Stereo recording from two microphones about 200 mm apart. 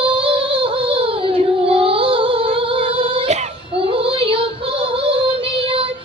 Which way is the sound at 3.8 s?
25° right (ahead or behind).